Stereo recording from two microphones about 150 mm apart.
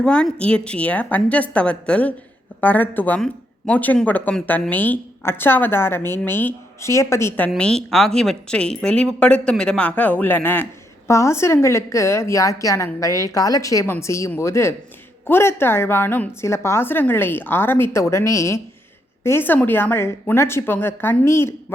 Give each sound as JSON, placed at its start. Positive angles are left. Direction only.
{"t": 0.0, "sound": "a woman's voice", "side_deg": 5}